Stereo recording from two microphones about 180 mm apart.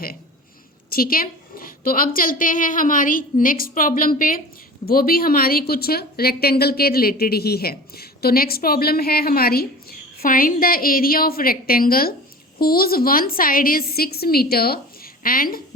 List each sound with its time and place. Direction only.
0.9 s a woman's voice: 55° left (ahead or behind)